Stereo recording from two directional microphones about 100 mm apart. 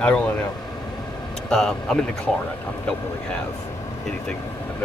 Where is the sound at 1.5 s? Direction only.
5° left (ahead or behind).